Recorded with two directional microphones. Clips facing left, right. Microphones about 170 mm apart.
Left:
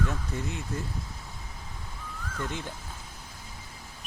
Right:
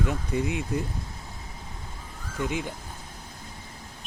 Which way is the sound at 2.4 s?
10° right (ahead or behind).